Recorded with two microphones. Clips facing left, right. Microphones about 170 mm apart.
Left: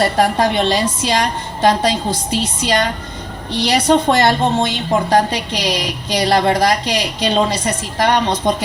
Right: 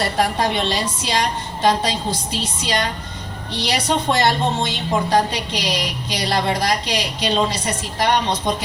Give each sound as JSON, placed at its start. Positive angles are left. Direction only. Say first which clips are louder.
{"t": 0.0, "sound": "a woman's voice", "louder": "left 5 dB", "side_deg": 50}